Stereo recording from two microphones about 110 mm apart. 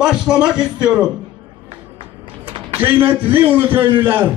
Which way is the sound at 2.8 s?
20° right (ahead or behind).